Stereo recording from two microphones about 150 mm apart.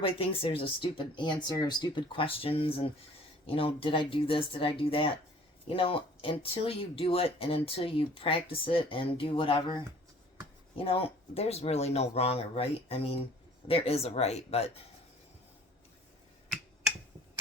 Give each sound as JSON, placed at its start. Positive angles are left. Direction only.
{"t": 0.0, "sound": "speech", "side_deg": 40}